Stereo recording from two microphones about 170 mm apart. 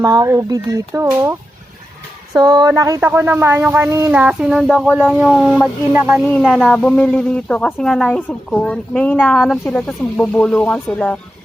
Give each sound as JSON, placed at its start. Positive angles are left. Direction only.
{"t": 0.0, "sound": "a woman's voice", "side_deg": -20}